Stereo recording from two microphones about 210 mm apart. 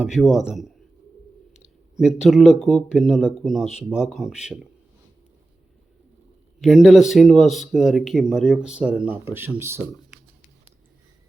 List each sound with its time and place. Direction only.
0.0 s speech: centre (ahead or behind)
2.0 s speech: centre (ahead or behind)
6.6 s speech: centre (ahead or behind)